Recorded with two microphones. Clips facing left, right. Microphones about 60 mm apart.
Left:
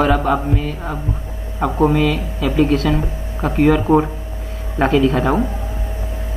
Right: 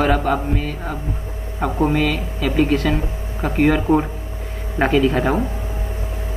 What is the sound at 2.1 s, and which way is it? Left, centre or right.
Speech, centre.